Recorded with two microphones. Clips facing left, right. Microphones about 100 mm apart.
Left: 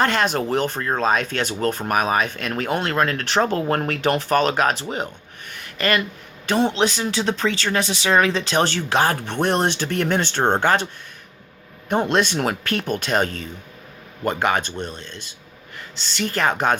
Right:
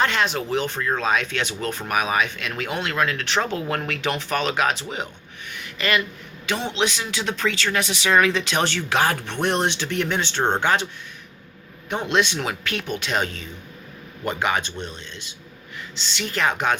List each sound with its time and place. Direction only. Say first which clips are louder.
0.0 s speech: left 3 dB; 45° left (ahead or behind)
5.5 s a sound: left 2 dB; 45° left (ahead or behind)
6.4 s speech: left 5 dB; 40° left (ahead or behind)
11.9 s speech: left 3 dB; 45° left (ahead or behind)